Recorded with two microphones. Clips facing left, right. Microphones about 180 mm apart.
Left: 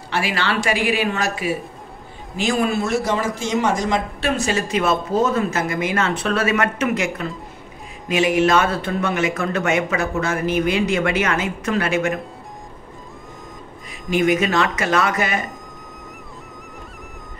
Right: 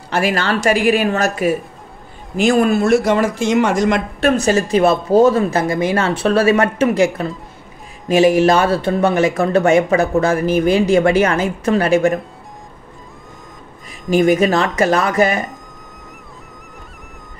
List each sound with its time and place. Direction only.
0.1 s speech: 45° right (ahead or behind); by 4.3 s 65° right (ahead or behind)
4.3 s speech: 40° right (ahead or behind)
14.1 s speech: 35° right (ahead or behind)